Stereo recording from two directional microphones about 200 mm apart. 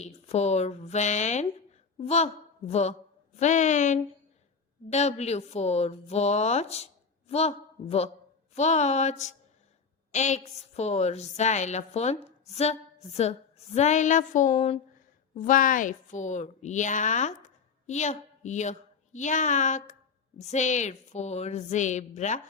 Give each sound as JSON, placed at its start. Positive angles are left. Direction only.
{"t": 0.0, "sound": "a woman's voice", "side_deg": 30}